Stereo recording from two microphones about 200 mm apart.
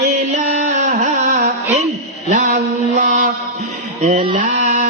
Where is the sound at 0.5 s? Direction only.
40° right (ahead or behind).